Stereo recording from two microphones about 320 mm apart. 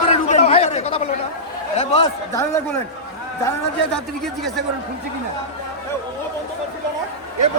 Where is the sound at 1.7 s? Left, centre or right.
Centre.